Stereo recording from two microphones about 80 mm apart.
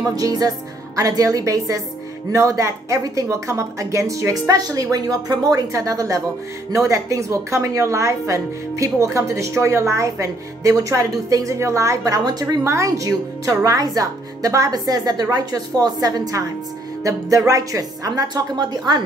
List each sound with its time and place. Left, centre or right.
0.1 s a woman's voice: right
12.3 s speech: right